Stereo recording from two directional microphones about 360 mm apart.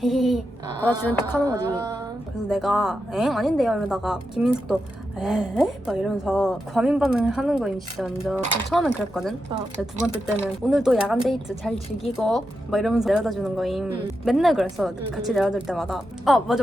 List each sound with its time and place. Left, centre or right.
0.0 s speech: centre
1.5 s a sound: centre
2.5 s speech: centre